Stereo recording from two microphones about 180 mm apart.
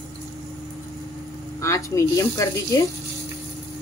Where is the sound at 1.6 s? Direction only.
15° left (ahead or behind).